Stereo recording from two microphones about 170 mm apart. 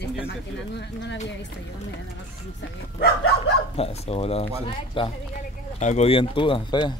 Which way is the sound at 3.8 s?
35° left (ahead or behind).